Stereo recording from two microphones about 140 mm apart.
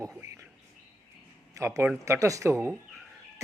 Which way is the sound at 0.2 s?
15° right (ahead or behind).